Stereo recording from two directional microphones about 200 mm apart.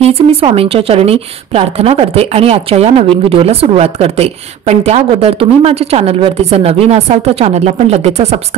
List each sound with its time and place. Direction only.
0.0 s a woman's voice: 30° right (ahead or behind)